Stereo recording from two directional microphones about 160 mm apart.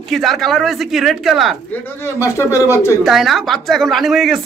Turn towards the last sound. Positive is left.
turn(degrees=0)  # may be behind; listen again after turning